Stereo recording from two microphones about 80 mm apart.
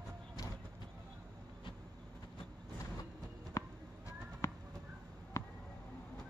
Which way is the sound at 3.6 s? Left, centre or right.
Left.